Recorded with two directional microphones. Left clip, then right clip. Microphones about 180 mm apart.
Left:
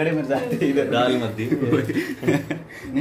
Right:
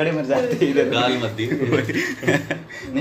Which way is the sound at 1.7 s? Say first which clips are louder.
Right 2 dB; 5° right (ahead or behind).